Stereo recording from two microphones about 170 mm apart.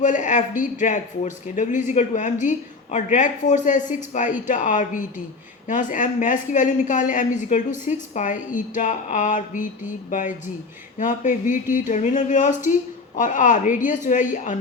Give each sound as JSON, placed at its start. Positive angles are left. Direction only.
{"t": 0.0, "sound": "speech", "side_deg": 50}